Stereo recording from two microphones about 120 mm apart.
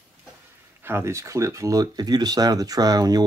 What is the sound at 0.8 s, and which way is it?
Speech, 20° right (ahead or behind).